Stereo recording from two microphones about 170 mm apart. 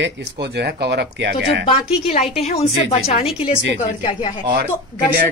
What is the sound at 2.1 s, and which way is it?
A woman's voice, 40° left (ahead or behind).